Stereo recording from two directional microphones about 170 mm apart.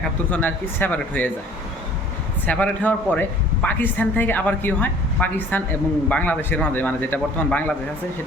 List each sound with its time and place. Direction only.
0.3 s speech: 10° left (ahead or behind)
2.5 s speech: 10° left (ahead or behind)